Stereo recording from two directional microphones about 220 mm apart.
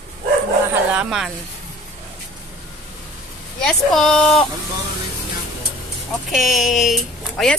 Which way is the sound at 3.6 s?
5° left (ahead or behind).